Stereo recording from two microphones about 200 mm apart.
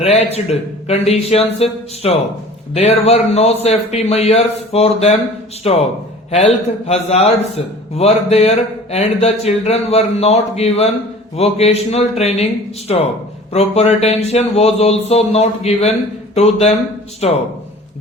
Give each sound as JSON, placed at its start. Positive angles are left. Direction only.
{"t": 0.0, "sound": "a man's voice", "side_deg": 30}